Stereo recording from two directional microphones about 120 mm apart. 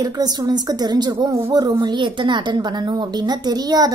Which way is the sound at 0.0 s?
35° right (ahead or behind).